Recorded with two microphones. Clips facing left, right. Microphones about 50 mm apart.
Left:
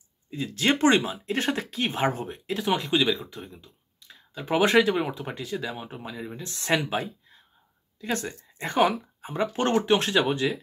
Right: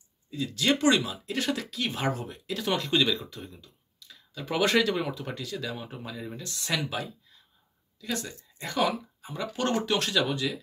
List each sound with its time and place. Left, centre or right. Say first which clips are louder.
0.5 s speech: left 3 dB; left
2.6 s speech: left 2 dB; centre
6.5 s speech: left 6 dB; left